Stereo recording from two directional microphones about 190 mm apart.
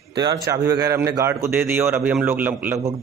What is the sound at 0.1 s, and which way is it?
Speech, 20° right (ahead or behind).